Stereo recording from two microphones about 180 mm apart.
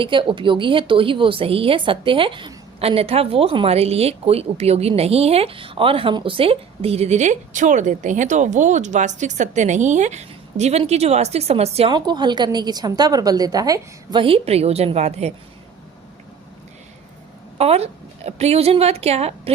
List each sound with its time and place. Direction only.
0.0 s a woman's voice: 30° right (ahead or behind)
17.6 s a woman's voice: 35° right (ahead or behind)